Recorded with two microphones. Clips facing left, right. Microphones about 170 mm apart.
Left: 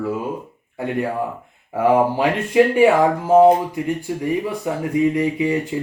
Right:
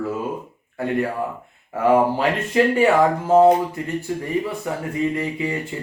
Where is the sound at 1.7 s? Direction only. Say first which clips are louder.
Left 1 dB; 15° left (ahead or behind).